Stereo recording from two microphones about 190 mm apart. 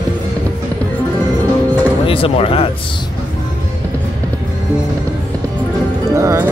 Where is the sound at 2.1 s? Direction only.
30° left (ahead or behind).